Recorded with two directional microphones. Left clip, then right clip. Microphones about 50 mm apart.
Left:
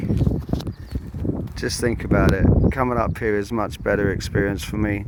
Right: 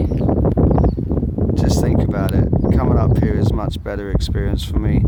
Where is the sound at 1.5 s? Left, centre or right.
Centre.